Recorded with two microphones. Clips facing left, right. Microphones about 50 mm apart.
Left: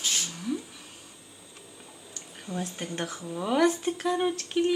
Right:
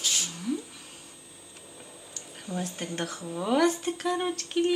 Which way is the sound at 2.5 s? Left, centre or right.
Centre.